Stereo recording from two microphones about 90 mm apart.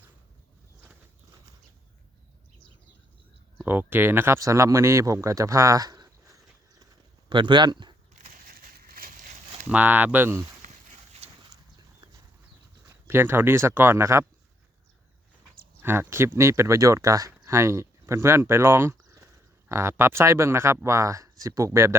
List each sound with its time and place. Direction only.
3.6 s speech: 20° right (ahead or behind)
4.4 s speech: 35° right (ahead or behind)
7.3 s speech: 60° right (ahead or behind)
9.6 s speech: 20° right (ahead or behind)
13.1 s speech: 25° right (ahead or behind)
15.8 s speech: 25° right (ahead or behind)